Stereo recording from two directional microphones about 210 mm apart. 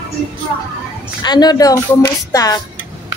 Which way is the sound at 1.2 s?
20° left (ahead or behind).